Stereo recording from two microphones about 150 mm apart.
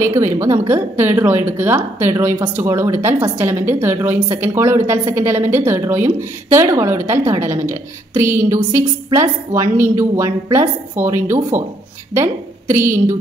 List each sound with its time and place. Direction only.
0.0 s a woman's voice: 15° right (ahead or behind)